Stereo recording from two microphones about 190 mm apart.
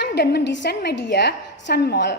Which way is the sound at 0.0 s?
60° left (ahead or behind).